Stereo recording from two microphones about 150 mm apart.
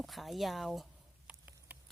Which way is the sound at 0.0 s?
Centre (ahead or behind).